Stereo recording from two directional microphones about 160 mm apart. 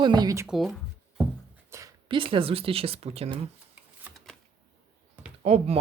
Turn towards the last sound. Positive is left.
turn(degrees=-40)  # may be behind; listen again after turning